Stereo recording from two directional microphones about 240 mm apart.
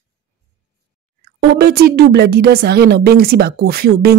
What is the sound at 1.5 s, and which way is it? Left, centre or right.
Speech, right.